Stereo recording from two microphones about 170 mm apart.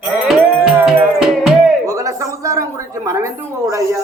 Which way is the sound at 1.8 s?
20° right (ahead or behind).